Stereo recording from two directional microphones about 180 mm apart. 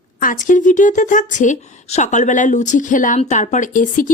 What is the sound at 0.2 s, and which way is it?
A woman's voice, 50° left (ahead or behind).